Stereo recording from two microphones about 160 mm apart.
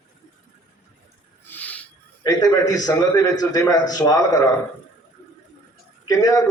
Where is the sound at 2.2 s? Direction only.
25° left (ahead or behind).